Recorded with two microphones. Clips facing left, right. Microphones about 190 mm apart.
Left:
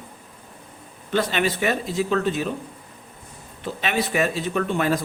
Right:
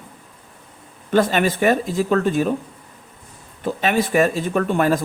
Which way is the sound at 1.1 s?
50° right (ahead or behind).